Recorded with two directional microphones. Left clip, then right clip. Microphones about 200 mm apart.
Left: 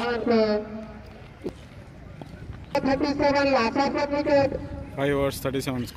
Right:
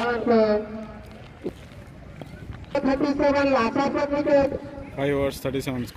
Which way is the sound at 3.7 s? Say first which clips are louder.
Even; 60° right (ahead or behind).